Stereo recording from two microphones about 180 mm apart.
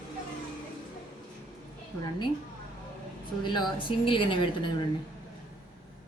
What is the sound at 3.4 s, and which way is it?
Speech, 25° left (ahead or behind).